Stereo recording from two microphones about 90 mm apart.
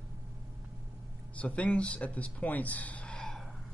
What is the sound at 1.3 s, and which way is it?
Speech, 15° left (ahead or behind).